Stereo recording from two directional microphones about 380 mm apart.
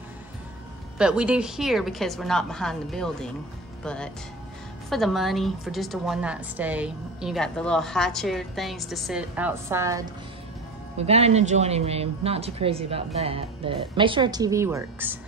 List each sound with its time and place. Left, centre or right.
0.9 s a woman's voice: centre